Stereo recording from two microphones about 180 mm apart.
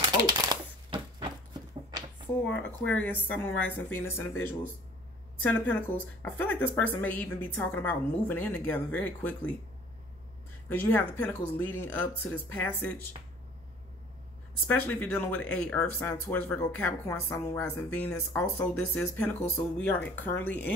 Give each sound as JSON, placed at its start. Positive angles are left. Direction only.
{"t": 0.1, "sound": "a sound", "side_deg": -25}
{"t": 2.6, "sound": "speech", "side_deg": 5}
{"t": 10.7, "sound": "speech", "side_deg": 10}
{"t": 14.7, "sound": "speech", "side_deg": 10}